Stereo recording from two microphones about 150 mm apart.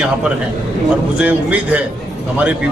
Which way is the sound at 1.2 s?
10° right (ahead or behind).